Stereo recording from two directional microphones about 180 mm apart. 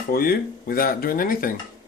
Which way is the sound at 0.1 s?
55° left (ahead or behind).